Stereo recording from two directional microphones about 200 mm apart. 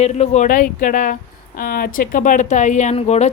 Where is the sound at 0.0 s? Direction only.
35° left (ahead or behind).